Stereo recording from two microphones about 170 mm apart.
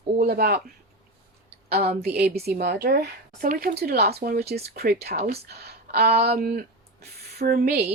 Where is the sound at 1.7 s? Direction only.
70° right (ahead or behind); by 3.7 s 55° right (ahead or behind).